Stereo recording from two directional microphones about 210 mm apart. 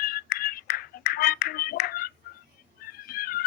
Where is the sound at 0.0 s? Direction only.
45° left (ahead or behind).